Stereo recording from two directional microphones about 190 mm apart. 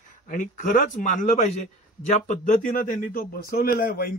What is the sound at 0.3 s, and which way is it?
A man's voice, 45° left (ahead or behind).